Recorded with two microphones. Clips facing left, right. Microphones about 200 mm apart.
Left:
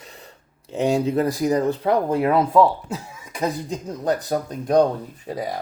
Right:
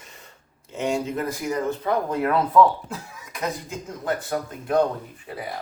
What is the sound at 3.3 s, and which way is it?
Speech, 35° left (ahead or behind).